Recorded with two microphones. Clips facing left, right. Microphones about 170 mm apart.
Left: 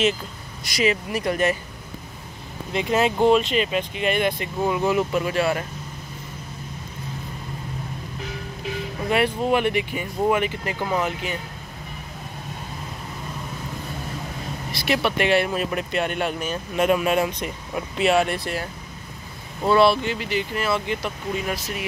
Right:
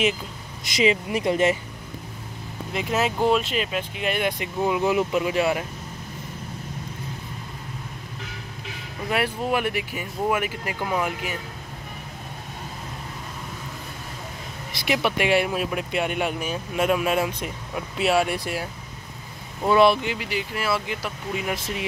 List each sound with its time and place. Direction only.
0.7 s speech: 20° right (ahead or behind)
2.7 s speech: centre (ahead or behind)
9.1 s speech: 5° right (ahead or behind)
14.9 s speech: 15° right (ahead or behind)